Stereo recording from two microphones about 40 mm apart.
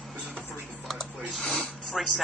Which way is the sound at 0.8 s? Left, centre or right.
Centre.